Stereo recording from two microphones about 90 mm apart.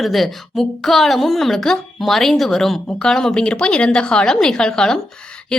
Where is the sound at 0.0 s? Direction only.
Centre (ahead or behind).